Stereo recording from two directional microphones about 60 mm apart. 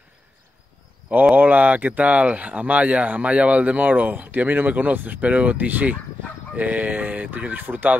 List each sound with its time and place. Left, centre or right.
1.3 s speech: right